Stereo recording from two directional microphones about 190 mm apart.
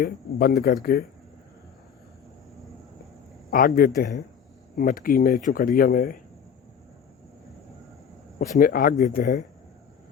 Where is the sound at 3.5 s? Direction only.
50° left (ahead or behind).